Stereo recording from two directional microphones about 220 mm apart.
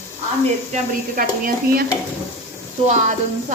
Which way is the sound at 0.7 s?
40° right (ahead or behind).